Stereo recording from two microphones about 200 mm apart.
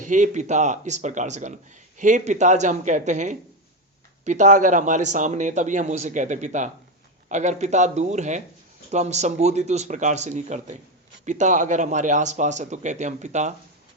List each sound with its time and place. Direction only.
0.0 s speech: 40° right (ahead or behind)